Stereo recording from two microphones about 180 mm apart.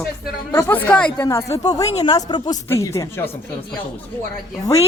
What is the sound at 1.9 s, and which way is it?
Speech, 35° left (ahead or behind).